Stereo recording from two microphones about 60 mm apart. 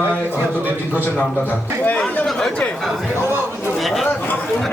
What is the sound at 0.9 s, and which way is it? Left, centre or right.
A man's voice, left.